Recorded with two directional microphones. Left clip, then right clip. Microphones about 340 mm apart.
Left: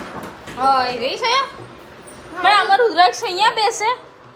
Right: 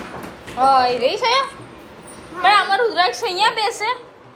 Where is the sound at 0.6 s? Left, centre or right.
Centre.